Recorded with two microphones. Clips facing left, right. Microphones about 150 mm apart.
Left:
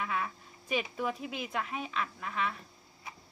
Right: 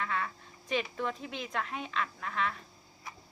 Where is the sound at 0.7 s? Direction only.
10° left (ahead or behind).